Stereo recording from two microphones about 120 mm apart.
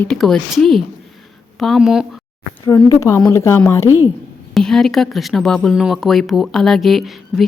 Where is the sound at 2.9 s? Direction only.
30° left (ahead or behind).